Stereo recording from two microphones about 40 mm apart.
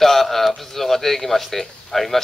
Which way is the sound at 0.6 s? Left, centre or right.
Centre.